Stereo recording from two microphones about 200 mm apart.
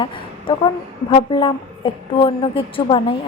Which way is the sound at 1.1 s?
25° left (ahead or behind).